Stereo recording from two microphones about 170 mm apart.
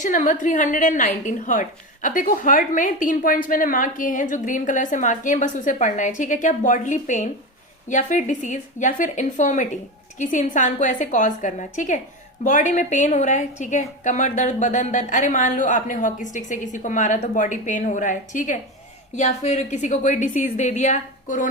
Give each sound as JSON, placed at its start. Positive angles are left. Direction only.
{"t": 0.0, "sound": "a woman's voice", "side_deg": 50}